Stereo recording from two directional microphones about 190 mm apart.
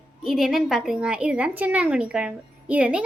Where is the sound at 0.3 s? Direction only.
Centre (ahead or behind).